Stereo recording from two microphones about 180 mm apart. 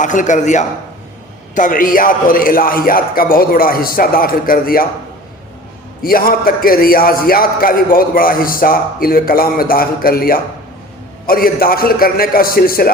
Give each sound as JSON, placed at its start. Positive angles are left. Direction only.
{"t": 0.0, "sound": "a man's voice", "side_deg": 45}
{"t": 6.0, "sound": "a man's voice", "side_deg": 55}